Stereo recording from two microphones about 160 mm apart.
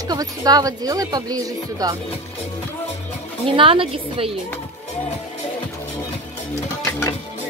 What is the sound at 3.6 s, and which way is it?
Speech, 35° right (ahead or behind).